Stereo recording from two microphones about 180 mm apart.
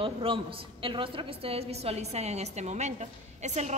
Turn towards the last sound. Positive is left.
turn(degrees=-40)  # may be behind; listen again after turning